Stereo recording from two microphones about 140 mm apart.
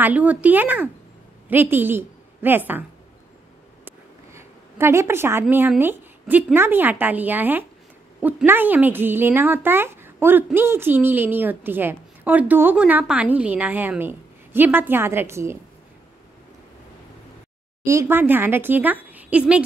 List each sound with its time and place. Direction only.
0.0 s a woman's voice: 10° right (ahead or behind)
3.8 s a sound: 20° right (ahead or behind)
5.8 s a woman's voice: 15° right (ahead or behind)
17.8 s a woman's voice: 20° right (ahead or behind)